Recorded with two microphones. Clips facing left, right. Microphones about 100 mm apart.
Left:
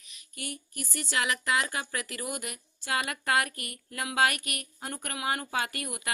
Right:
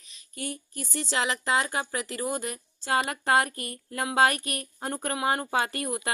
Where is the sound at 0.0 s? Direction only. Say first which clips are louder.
Right 5 dB; 30° right (ahead or behind).